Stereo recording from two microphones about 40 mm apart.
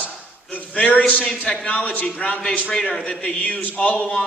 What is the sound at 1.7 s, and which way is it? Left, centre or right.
A man's voice, left.